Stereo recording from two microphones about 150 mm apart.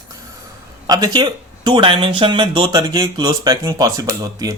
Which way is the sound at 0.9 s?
25° right (ahead or behind).